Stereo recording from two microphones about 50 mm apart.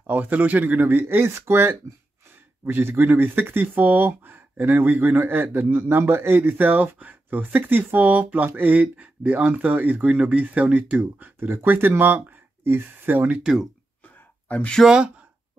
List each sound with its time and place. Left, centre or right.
0.0 s speech: right
1.0 s speech: right
2.6 s speech: right
8.9 s speech: right
13.4 s speech: centre
14.0 s a sound: left
14.9 s speech: centre